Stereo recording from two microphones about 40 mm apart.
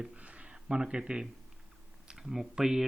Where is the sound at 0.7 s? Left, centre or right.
Right.